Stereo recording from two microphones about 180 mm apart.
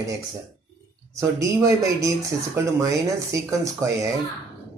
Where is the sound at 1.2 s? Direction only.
15° right (ahead or behind).